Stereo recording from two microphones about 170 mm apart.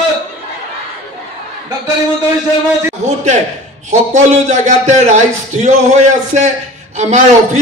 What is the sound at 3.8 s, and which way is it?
A man's voice, 45° right (ahead or behind).